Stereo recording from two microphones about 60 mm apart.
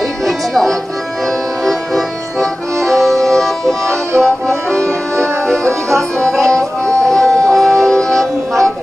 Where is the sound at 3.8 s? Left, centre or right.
Right.